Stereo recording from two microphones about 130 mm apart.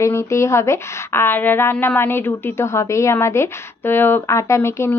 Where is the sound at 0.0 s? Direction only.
20° left (ahead or behind).